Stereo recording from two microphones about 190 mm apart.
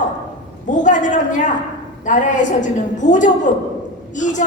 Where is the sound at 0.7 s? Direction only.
40° left (ahead or behind).